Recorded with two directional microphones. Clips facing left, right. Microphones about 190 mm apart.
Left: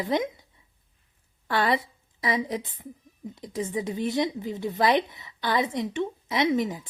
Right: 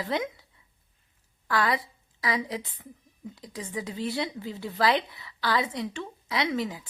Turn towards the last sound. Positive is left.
turn(degrees=20)  # may be behind; listen again after turning